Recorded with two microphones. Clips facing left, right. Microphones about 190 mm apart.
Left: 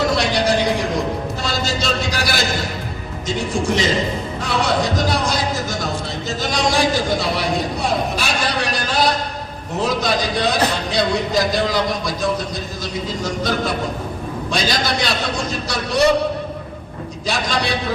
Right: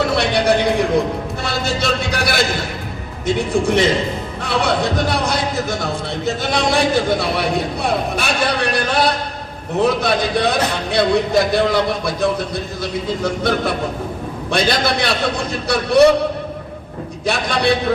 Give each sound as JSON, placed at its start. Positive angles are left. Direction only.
{"t": 0.0, "sound": "a sound", "side_deg": -60}
{"t": 1.5, "sound": "a man's voice", "side_deg": -60}
{"t": 17.2, "sound": "speech", "side_deg": -60}